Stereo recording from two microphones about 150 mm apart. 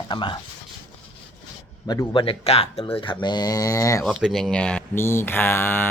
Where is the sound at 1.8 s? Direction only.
30° left (ahead or behind).